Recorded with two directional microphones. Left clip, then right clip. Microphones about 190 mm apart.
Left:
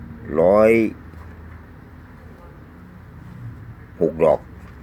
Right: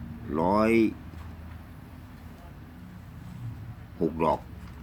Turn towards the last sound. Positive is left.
turn(degrees=15)  # may be behind; listen again after turning